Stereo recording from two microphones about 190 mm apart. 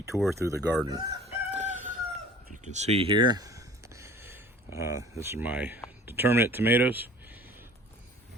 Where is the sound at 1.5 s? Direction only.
40° right (ahead or behind).